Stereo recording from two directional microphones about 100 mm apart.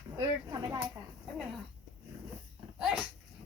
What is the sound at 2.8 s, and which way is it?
Dog, 5° right (ahead or behind).